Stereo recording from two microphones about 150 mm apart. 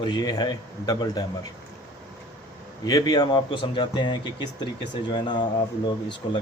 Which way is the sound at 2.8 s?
25° left (ahead or behind).